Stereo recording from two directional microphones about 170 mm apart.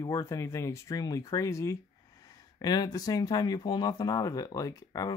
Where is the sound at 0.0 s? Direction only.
15° left (ahead or behind).